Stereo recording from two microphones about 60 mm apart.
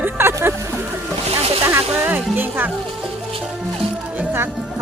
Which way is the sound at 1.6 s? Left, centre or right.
Right.